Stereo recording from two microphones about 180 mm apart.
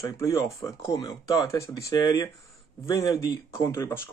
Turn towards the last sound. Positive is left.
turn(degrees=15)  # may be behind; listen again after turning